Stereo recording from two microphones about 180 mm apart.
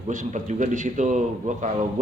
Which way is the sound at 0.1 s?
45° right (ahead or behind).